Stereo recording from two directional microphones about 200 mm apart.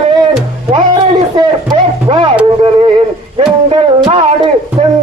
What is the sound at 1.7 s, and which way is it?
Music, 25° right (ahead or behind).